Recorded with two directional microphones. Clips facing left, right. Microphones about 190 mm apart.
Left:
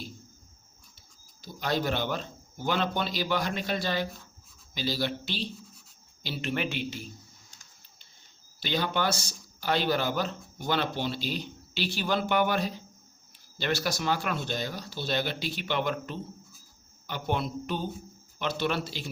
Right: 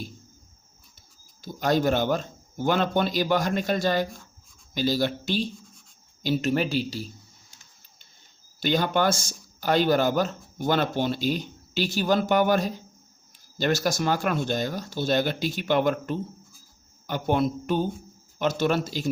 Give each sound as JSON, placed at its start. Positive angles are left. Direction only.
{"t": 1.4, "sound": "a man's voice", "side_deg": -45}
{"t": 8.6, "sound": "speech", "side_deg": -50}